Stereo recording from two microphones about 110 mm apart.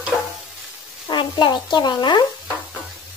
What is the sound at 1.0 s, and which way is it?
Speech, 45° left (ahead or behind).